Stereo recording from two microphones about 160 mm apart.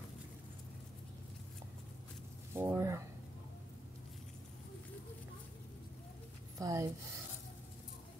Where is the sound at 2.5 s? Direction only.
15° right (ahead or behind).